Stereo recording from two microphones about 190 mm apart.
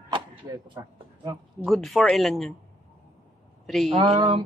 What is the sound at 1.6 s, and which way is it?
Speech, centre (ahead or behind).